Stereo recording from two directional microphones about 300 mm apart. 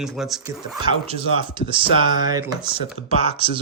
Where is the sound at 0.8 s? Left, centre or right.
Centre.